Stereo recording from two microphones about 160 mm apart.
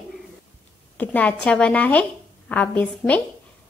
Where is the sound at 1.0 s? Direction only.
10° left (ahead or behind).